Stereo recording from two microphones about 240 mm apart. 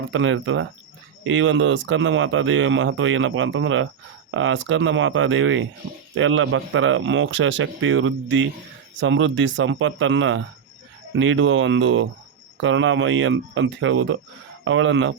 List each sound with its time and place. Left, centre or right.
0.1 s speech: right